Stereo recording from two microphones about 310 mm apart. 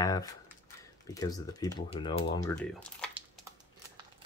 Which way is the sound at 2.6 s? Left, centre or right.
Centre.